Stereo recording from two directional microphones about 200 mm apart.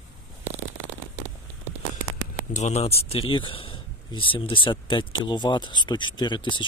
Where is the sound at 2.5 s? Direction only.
35° left (ahead or behind).